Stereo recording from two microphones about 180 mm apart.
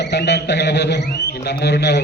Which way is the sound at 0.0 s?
70° left (ahead or behind).